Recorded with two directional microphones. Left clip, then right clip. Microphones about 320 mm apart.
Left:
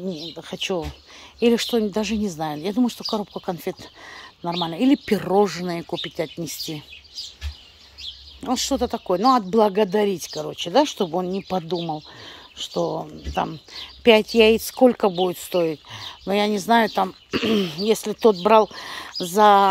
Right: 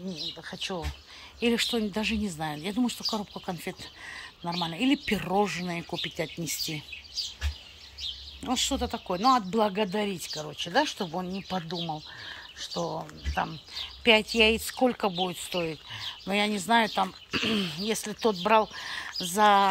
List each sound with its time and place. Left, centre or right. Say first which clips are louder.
0.4 s speech: left 8 dB; left
8.4 s speech: left 6 dB; centre